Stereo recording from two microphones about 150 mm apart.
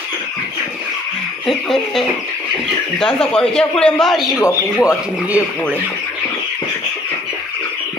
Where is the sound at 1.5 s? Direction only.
Centre (ahead or behind).